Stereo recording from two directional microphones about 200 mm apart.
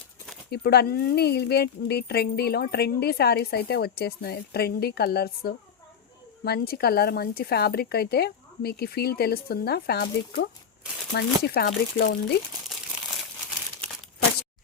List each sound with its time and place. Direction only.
0.5 s a woman's voice: 55° left (ahead or behind)